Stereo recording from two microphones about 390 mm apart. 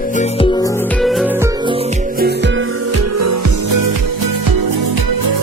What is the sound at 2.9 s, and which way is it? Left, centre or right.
Music, right.